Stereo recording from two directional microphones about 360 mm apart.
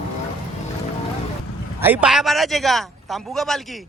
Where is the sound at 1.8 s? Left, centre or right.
Centre.